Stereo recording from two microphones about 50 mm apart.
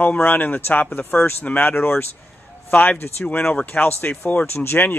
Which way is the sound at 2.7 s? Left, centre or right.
Left.